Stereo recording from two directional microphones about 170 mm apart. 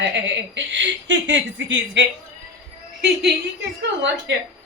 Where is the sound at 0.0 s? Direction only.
90° right.